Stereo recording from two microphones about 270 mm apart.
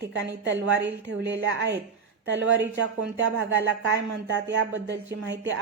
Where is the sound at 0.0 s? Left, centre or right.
Right.